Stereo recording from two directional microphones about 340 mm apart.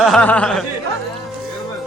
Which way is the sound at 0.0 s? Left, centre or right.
Centre.